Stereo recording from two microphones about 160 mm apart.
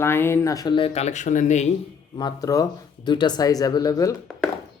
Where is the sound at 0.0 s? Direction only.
15° left (ahead or behind); by 1.6 s 50° left (ahead or behind).